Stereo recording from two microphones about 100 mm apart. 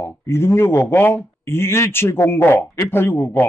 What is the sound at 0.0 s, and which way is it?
Speech, 25° left (ahead or behind).